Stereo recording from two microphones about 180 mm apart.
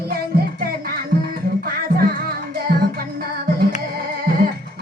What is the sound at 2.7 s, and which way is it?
Music, 50° right (ahead or behind).